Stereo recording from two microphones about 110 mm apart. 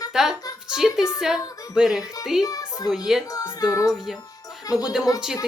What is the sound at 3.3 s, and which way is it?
Music, 35° left (ahead or behind).